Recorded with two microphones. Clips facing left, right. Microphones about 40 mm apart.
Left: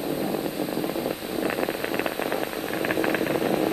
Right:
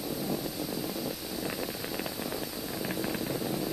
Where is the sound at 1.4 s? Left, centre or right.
Left.